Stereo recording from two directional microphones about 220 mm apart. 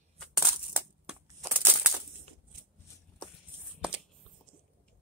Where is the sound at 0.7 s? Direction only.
10° right (ahead or behind).